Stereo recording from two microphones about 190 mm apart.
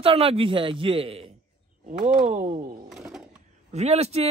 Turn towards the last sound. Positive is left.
turn(degrees=-30)  # may be behind; listen again after turning